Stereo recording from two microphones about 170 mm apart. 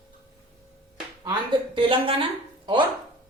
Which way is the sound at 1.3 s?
30° right (ahead or behind).